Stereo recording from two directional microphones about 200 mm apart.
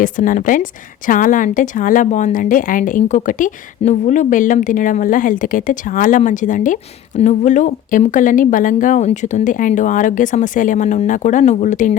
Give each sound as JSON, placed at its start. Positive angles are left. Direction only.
{"t": 0.0, "sound": "a woman's voice", "side_deg": 40}